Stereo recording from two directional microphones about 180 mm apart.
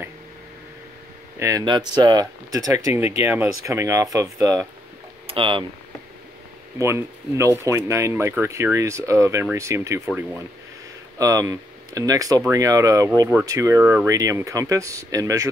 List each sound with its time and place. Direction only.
1.4 s speech: 20° right (ahead or behind)
5.2 s speech: 30° right (ahead or behind)
6.8 s speech: 15° right (ahead or behind)
11.1 s speech: 20° right (ahead or behind)